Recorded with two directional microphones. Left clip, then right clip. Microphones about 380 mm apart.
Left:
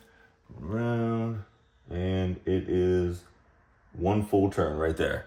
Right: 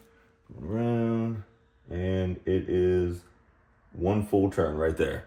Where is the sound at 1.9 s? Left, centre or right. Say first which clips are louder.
Right 1 dB; centre.